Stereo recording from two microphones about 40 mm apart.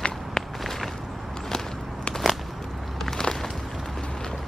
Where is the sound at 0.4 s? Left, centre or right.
Centre.